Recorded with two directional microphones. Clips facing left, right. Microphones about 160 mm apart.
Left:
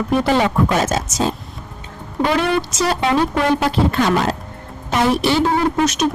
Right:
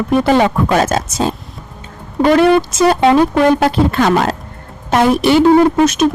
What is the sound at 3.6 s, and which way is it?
Speech, 55° right (ahead or behind).